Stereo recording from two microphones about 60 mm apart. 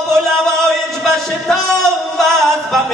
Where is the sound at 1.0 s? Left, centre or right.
Centre.